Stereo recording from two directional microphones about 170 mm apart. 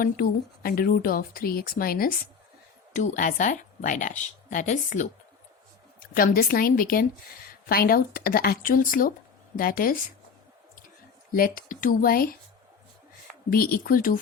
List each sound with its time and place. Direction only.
0.0 s speech: 60° left (ahead or behind)
2.9 s a woman's voice: 45° left (ahead or behind)
6.0 s speech: 55° left (ahead or behind)
11.3 s speech: 60° left (ahead or behind)
13.5 s speech: 60° left (ahead or behind)